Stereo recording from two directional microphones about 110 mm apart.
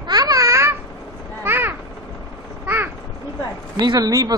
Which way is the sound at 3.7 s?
40° right (ahead or behind).